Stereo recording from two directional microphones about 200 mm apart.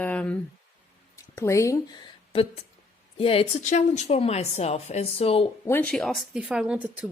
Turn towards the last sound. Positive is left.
turn(degrees=-5)  # may be behind; listen again after turning